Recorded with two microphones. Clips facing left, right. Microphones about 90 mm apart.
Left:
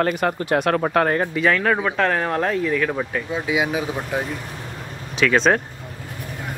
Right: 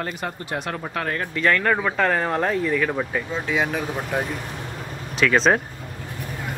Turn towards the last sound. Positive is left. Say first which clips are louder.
# left 1 dB
turn(degrees=0)  # may be behind; listen again after turning